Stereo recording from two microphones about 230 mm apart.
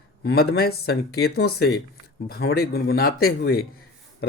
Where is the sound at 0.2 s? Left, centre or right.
Left.